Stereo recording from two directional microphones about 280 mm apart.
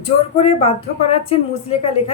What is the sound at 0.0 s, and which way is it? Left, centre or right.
A woman's voice, left.